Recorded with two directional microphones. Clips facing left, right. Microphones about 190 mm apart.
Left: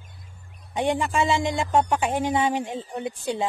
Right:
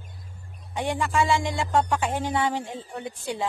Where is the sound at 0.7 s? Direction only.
20° left (ahead or behind).